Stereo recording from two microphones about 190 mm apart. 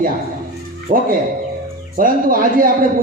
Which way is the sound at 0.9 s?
50° right (ahead or behind).